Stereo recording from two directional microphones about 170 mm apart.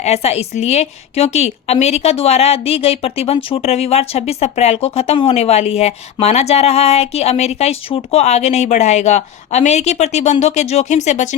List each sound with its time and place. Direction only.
0.0 s a woman's voice: 40° left (ahead or behind)